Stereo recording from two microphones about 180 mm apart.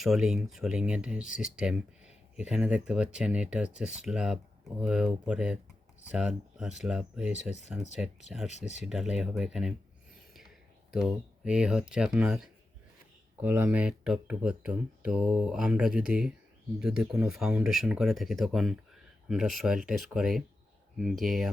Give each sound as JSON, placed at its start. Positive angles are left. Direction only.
{"t": 0.0, "sound": "speech", "side_deg": 0}
{"t": 8.4, "sound": "speech", "side_deg": 40}
{"t": 8.8, "sound": "speech", "side_deg": -5}
{"t": 10.9, "sound": "speech", "side_deg": -5}